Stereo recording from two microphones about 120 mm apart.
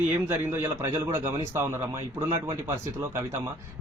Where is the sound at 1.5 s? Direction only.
20° right (ahead or behind).